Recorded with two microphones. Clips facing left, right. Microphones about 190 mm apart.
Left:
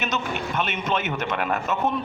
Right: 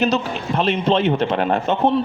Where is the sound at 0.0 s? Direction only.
35° right (ahead or behind).